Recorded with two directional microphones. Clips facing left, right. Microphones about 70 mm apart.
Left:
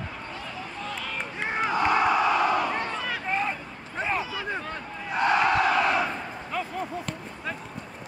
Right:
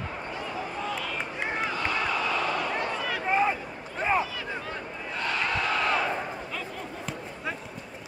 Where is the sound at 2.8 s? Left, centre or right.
Centre.